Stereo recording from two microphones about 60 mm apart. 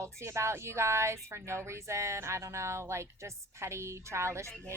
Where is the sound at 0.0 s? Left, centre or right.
Right.